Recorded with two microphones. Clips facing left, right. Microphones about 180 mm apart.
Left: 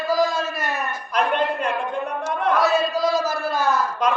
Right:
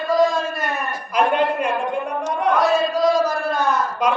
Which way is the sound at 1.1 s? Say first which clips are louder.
Right 3 dB; 10° right (ahead or behind).